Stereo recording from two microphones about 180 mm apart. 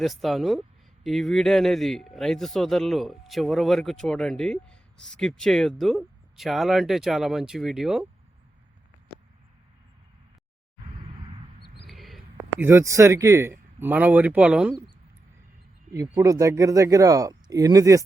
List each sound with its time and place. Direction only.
0.0 s speech: centre (ahead or behind)
11.9 s a sound: centre (ahead or behind)
12.6 s speech: 15° right (ahead or behind)
15.9 s speech: 15° right (ahead or behind)